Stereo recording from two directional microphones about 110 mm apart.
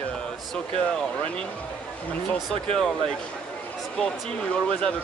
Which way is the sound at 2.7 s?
5° left (ahead or behind).